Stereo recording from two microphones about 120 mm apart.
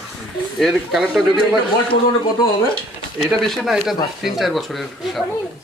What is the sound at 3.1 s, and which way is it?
A man's voice, centre (ahead or behind).